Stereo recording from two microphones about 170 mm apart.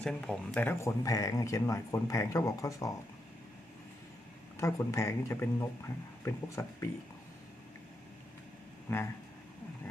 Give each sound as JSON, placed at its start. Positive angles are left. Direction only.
{"t": 0.0, "sound": "speech", "side_deg": 5}
{"t": 4.6, "sound": "speech", "side_deg": 15}
{"t": 8.9, "sound": "speech", "side_deg": 15}